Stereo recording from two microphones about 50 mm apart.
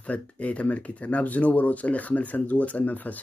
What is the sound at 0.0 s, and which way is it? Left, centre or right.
Speech, left.